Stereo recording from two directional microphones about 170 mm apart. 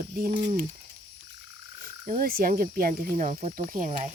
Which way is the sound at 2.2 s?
60° right (ahead or behind).